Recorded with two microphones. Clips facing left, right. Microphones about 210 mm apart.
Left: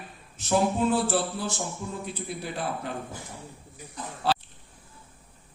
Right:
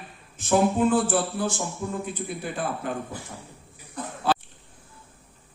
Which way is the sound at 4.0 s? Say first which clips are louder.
Right 4 dB; 55° right (ahead or behind).